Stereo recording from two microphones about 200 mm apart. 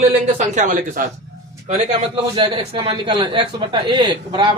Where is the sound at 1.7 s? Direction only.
25° right (ahead or behind).